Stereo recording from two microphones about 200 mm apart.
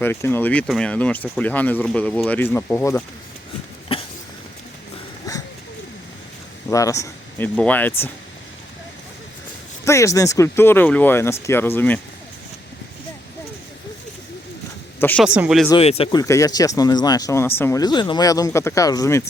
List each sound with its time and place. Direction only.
0.0 s speech: 10° left (ahead or behind)
3.9 s a sound: 30° left (ahead or behind)
6.7 s speech: 15° left (ahead or behind)
9.8 s speech: 15° left (ahead or behind)
14.9 s speech: 10° left (ahead or behind)
15.2 s speech: 5° right (ahead or behind)
15.8 s speech: 30° left (ahead or behind)
16.2 s speech: 15° left (ahead or behind)